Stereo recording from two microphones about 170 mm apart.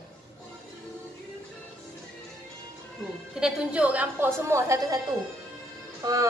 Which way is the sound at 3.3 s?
5° right (ahead or behind).